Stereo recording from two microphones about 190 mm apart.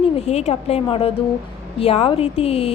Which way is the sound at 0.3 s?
35° left (ahead or behind).